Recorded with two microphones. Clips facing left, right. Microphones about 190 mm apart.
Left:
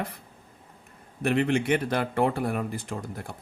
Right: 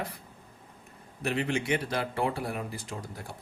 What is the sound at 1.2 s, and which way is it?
Speech, 55° left (ahead or behind).